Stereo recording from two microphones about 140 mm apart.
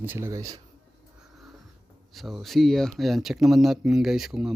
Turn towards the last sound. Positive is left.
turn(degrees=-5)  # may be behind; listen again after turning